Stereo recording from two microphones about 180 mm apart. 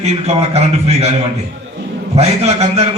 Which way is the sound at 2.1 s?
35° right (ahead or behind).